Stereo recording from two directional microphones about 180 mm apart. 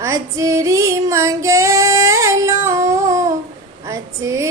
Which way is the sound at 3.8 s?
15° right (ahead or behind).